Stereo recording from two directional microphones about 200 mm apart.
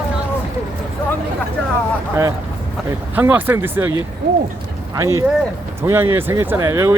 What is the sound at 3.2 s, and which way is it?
Speech, 10° right (ahead or behind).